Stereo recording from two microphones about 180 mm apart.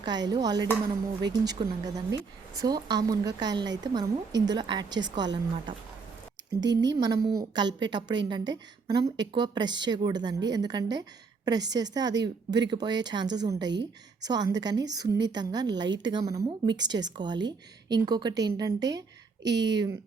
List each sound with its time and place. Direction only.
0.0 s a woman's voice: 25° right (ahead or behind)
19.5 s speech: 80° right